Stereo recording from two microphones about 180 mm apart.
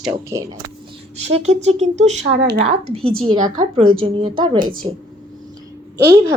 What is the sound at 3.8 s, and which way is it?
A woman's voice, 30° right (ahead or behind).